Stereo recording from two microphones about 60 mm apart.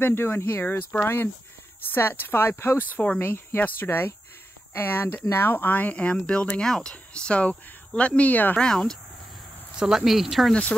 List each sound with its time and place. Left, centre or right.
0.0 s speech: left
2.9 s speech: left
3.2 s speech: left
8.5 s speech: centre
9.8 s speech: centre
10.5 s speech: left